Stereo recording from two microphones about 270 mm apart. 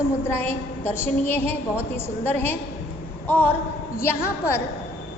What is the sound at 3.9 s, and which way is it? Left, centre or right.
Speech, centre.